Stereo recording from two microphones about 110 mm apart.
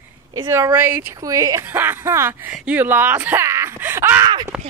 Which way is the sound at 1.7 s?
20° right (ahead or behind).